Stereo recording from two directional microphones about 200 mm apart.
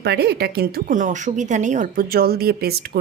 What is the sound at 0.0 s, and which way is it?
Speech, 55° right (ahead or behind).